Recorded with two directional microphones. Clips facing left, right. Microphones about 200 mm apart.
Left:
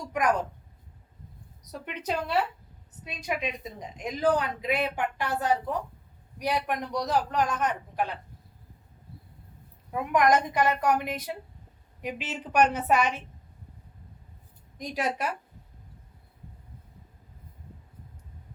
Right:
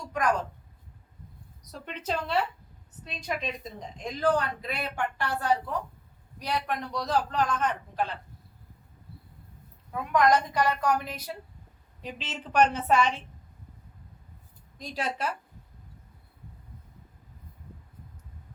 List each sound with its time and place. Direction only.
0.1 s a sound: 15° left (ahead or behind)
1.8 s a woman's voice: 15° left (ahead or behind)
9.9 s a woman's voice: 15° left (ahead or behind)
14.8 s a woman's voice: 20° left (ahead or behind)